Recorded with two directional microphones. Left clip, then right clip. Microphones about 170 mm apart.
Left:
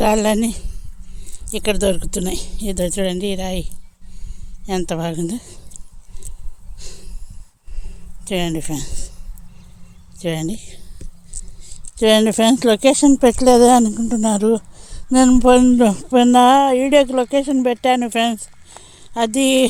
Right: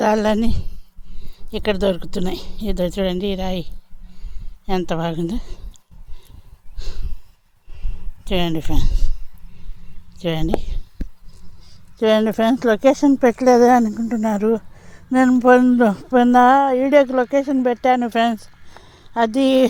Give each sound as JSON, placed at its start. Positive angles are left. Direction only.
{"t": 0.0, "sound": "a woman's voice", "side_deg": 5}
{"t": 6.7, "sound": "snort", "side_deg": 0}
{"t": 7.9, "sound": "a sound", "side_deg": 0}
{"t": 10.2, "sound": "a woman's voice", "side_deg": 5}
{"t": 11.9, "sound": "speech", "side_deg": 25}